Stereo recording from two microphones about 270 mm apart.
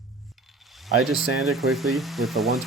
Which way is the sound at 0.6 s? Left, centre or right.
Centre.